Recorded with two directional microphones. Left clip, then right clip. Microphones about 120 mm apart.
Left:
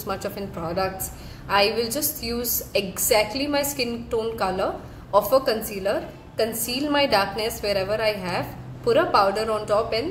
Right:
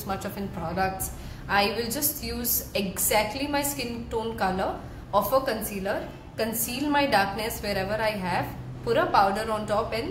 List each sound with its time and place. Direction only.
0.0 s a woman's voice: 35° left (ahead or behind)